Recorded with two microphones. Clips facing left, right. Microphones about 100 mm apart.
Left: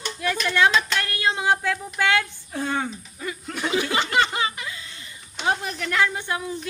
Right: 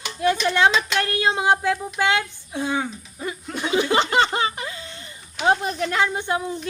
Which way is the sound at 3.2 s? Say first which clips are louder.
Right 2 dB; 25° right (ahead or behind).